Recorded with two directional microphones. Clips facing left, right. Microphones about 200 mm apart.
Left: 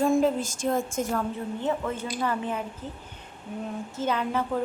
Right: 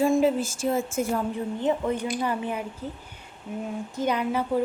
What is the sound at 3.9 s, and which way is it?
Speech, 15° right (ahead or behind).